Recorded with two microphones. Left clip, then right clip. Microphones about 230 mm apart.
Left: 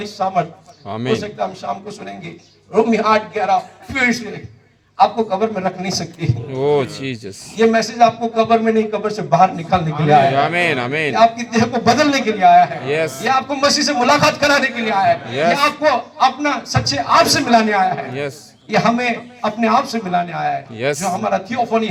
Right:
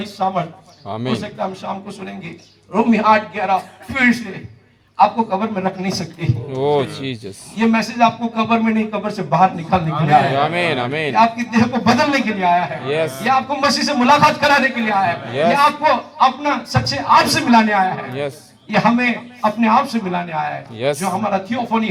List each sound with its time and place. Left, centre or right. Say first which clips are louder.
0.2 s speech: right 1 dB; left
0.9 s speech: left 3 dB; centre
1.7 s a man's voice: left 2 dB; left
6.5 s speech: left 1 dB; centre
7.6 s a man's voice: left 3 dB; left
10.3 s speech: left 1 dB; centre
11.1 s a man's voice: left 1 dB; left
12.8 s speech: left 1 dB; centre
13.2 s a man's voice: even; left
18.1 s speech: even; centre
18.7 s a man's voice: even; left
20.7 s speech: even; centre
21.2 s a man's voice: left 2 dB; left